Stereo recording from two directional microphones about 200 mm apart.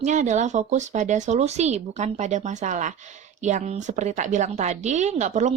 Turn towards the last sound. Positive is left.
turn(degrees=-35)  # may be behind; listen again after turning